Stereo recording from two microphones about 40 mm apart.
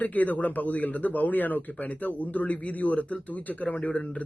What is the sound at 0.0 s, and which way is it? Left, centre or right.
Speech, left.